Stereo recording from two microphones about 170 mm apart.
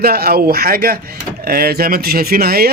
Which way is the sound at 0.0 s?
65° right (ahead or behind).